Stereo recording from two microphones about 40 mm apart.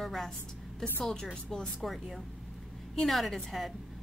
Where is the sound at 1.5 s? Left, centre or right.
Centre.